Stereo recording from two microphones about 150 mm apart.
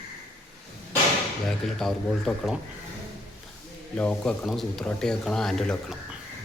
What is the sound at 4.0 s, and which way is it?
Speech, 5° left (ahead or behind).